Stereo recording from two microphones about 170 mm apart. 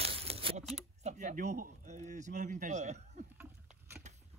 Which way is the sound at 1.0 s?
45° right (ahead or behind).